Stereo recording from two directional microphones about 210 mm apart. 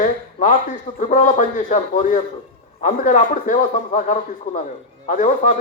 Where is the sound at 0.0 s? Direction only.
35° left (ahead or behind).